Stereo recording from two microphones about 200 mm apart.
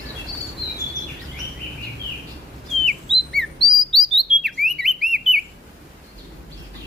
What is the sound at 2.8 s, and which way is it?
Bird, centre (ahead or behind).